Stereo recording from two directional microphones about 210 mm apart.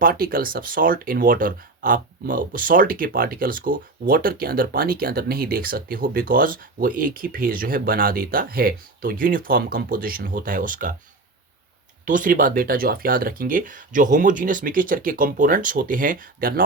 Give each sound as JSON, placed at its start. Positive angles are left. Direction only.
{"t": 0.0, "sound": "speech", "side_deg": -45}
{"t": 12.0, "sound": "speech", "side_deg": -40}